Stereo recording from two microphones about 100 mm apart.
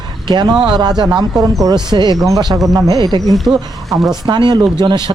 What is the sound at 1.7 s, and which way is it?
Speech, 50° right (ahead or behind).